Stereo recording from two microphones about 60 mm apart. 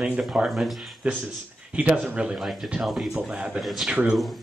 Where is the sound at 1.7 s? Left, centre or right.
Right.